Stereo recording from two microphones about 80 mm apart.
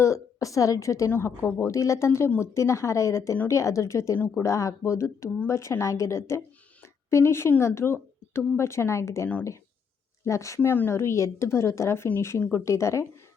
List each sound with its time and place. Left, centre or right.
0.0 s a woman's voice: left
6.8 s a sound: left
7.8 s speech: centre
8.3 s a woman's voice: left
10.7 s a woman's voice: left